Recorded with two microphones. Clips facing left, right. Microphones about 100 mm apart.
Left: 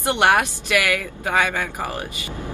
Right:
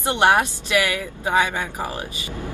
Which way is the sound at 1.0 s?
15° right (ahead or behind).